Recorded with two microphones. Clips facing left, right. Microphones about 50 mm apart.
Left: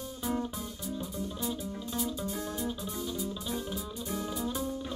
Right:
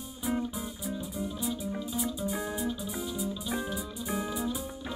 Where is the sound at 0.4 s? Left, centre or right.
Centre.